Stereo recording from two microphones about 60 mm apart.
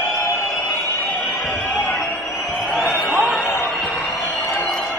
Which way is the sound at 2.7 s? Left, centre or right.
Centre.